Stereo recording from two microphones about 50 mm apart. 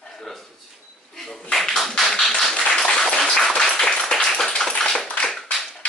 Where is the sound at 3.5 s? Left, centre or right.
Centre.